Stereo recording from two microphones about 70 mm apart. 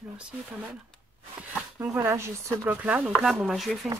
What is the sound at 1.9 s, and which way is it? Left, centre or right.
Speech, right.